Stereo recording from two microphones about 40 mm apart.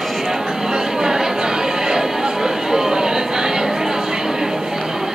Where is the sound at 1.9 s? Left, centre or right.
Centre.